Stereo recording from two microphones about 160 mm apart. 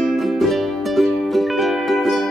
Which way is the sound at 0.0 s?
Centre (ahead or behind).